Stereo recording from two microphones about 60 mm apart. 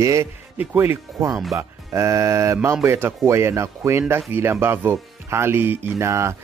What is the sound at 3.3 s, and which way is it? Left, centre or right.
Speech, right.